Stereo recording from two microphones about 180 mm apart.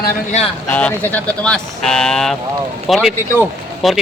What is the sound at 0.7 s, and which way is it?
Speech, 10° left (ahead or behind).